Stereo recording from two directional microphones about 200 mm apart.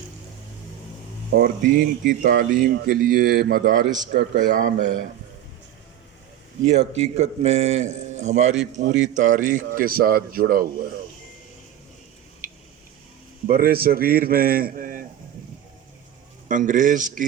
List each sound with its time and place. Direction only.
1.4 s speech: 50° right (ahead or behind)
6.7 s a man's voice: 35° right (ahead or behind)
13.5 s speech: 50° right (ahead or behind)
16.5 s a man's voice: 40° right (ahead or behind)